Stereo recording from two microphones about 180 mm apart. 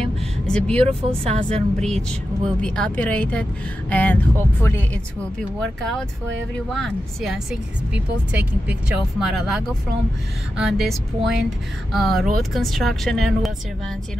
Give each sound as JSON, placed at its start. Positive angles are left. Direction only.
{"t": 0.0, "sound": "vehicle", "side_deg": 5}
{"t": 0.8, "sound": "speech", "side_deg": -35}
{"t": 1.5, "sound": "speech", "side_deg": 5}